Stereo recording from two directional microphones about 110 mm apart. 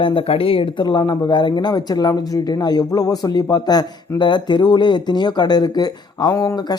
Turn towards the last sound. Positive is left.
turn(degrees=35)  # may be behind; listen again after turning